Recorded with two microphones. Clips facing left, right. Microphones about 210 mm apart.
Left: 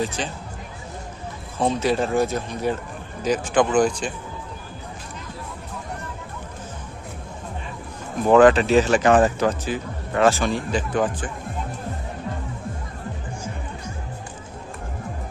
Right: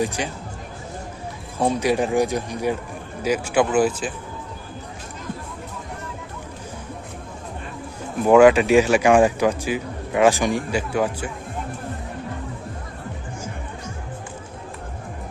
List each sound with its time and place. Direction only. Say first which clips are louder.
0.0 s speech: right 2 dB; 15° right (ahead or behind)
1.5 s speech: right 1 dB; 10° right (ahead or behind)
8.3 s speech: right 1 dB; 10° right (ahead or behind)